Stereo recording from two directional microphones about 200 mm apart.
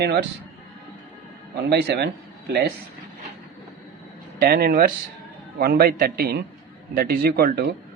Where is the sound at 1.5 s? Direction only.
55° right (ahead or behind).